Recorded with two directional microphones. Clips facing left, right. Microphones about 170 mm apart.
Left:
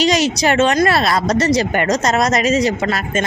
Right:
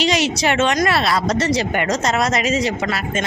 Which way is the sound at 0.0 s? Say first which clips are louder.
Left 3 dB; 40° left (ahead or behind).